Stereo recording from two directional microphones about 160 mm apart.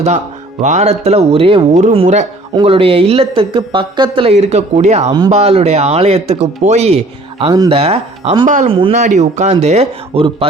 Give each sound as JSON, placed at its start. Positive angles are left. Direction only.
{"t": 0.6, "sound": "speech", "side_deg": -45}
{"t": 8.4, "sound": "speech", "side_deg": -55}